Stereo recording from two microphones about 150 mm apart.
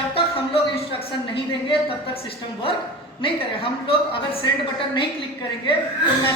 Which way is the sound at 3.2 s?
40° left (ahead or behind).